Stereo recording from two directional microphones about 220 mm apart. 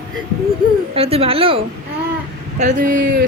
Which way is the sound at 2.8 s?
40° right (ahead or behind).